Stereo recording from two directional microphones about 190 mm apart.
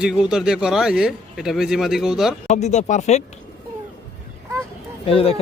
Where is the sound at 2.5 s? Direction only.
35° left (ahead or behind).